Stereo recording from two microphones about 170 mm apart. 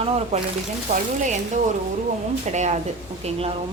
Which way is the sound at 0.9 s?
50° right (ahead or behind).